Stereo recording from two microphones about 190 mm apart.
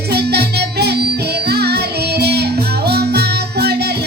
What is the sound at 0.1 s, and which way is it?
Music, 60° right (ahead or behind).